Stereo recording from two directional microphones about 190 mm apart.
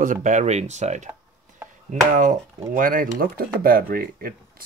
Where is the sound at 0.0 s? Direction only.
45° right (ahead or behind).